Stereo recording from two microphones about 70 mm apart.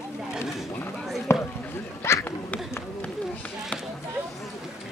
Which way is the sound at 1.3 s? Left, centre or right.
Left.